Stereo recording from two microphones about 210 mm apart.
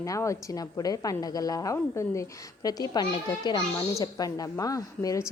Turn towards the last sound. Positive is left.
turn(degrees=15)  # may be behind; listen again after turning